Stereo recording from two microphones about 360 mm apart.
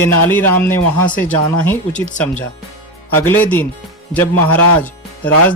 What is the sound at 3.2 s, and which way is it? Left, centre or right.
Speech, centre.